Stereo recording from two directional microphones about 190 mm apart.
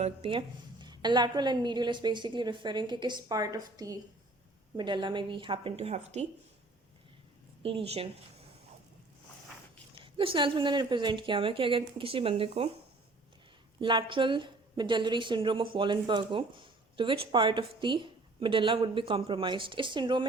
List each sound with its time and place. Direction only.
0.0 s a woman's voice: 30° right (ahead or behind)
7.6 s speech: 30° right (ahead or behind)
10.0 s a woman's voice: 30° right (ahead or behind)
13.8 s a woman's voice: 25° right (ahead or behind)